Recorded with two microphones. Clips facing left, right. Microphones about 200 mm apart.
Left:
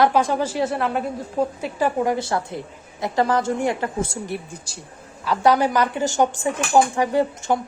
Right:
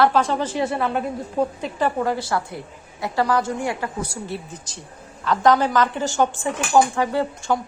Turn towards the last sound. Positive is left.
turn(degrees=20)  # may be behind; listen again after turning